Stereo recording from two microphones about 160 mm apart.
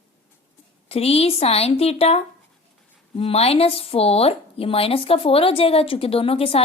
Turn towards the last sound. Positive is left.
turn(degrees=35)  # may be behind; listen again after turning